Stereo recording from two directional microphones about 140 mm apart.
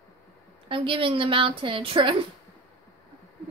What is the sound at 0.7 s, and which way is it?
A woman's voice, 40° right (ahead or behind).